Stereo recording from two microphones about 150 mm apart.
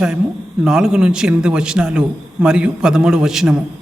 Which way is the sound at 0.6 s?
5° right (ahead or behind).